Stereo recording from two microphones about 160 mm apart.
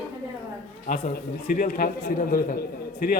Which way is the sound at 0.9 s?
55° left (ahead or behind).